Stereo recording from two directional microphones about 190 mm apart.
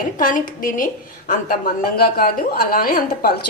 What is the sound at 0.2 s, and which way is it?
A woman's voice, 45° left (ahead or behind).